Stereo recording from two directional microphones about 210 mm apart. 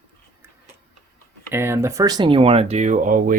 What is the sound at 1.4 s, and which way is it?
Speech, 10° right (ahead or behind).